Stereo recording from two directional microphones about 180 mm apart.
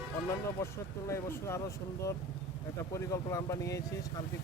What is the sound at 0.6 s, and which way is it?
Speech, 15° left (ahead or behind).